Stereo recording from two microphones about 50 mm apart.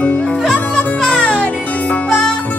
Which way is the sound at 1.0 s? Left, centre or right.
Centre.